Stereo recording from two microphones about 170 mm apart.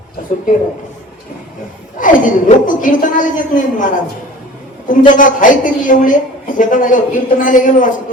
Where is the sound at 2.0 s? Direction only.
50° left (ahead or behind).